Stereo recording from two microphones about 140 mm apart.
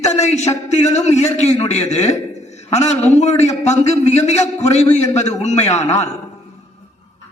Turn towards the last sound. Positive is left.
turn(degrees=55)  # may be behind; listen again after turning